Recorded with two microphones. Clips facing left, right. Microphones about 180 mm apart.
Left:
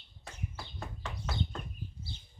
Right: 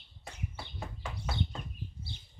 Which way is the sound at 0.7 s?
10° right (ahead or behind).